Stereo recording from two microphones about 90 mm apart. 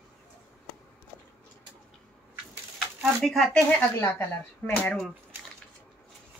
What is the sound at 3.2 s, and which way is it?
Speech, centre (ahead or behind).